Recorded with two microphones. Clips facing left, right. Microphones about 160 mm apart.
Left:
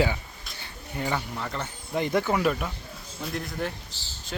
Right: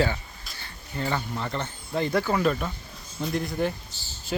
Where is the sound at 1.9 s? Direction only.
20° left (ahead or behind).